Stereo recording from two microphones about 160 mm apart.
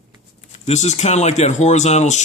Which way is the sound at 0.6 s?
45° left (ahead or behind).